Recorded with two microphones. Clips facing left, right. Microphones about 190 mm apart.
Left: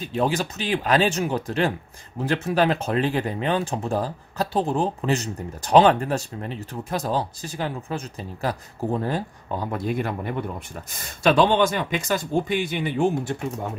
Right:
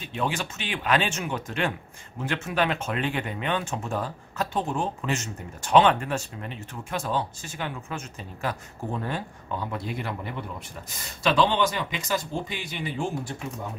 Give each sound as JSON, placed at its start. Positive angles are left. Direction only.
{"t": 0.0, "sound": "speech", "side_deg": 40}